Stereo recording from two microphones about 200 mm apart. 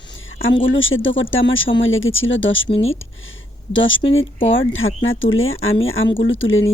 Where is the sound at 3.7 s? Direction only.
70° left (ahead or behind).